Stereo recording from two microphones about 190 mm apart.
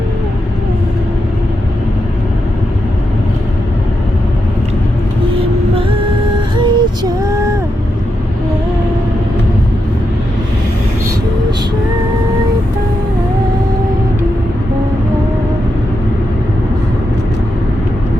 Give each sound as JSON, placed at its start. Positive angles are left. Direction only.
{"t": 6.6, "sound": "female singing", "side_deg": -20}